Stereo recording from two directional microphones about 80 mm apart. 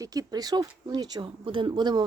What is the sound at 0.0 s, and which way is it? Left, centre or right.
Speech, right.